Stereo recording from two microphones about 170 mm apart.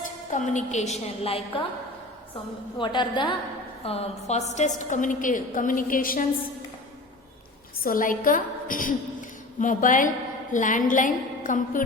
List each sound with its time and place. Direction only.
0.3 s a woman's voice: 45° left (ahead or behind)
2.7 s a woman's voice: 30° left (ahead or behind)
3.8 s a woman's voice: 35° left (ahead or behind); by 6.2 s 55° left (ahead or behind)
7.9 s a woman's voice: 55° left (ahead or behind)